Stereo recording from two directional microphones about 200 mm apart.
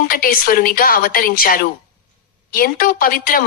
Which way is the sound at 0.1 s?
45° left (ahead or behind).